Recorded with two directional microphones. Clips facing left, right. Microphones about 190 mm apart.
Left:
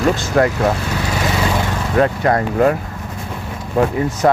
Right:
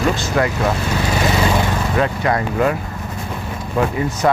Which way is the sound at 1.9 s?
45° left (ahead or behind).